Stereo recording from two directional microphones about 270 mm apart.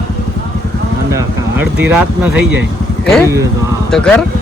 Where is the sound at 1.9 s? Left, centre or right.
Centre.